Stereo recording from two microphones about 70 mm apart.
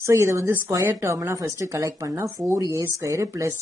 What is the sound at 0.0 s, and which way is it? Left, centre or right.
Speech, right.